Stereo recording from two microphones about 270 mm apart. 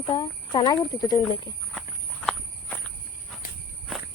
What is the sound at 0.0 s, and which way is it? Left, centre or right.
Speech, centre.